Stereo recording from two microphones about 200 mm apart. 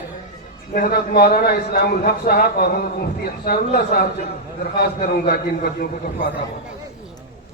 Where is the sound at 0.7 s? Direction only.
50° left (ahead or behind).